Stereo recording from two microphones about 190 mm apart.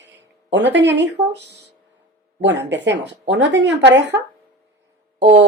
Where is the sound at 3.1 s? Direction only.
70° right (ahead or behind).